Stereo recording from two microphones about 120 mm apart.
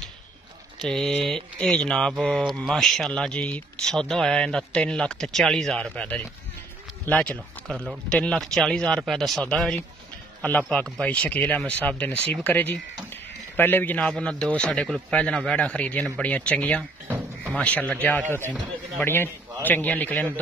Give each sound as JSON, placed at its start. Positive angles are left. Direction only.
{"t": 0.7, "sound": "a man's voice", "side_deg": 5}